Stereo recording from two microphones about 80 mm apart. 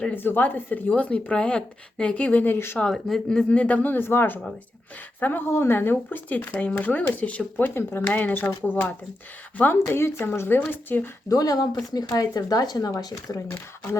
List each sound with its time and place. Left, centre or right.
0.0 s speech: left
2.9 s speech: centre
7.5 s speech: left
11.3 s speech: left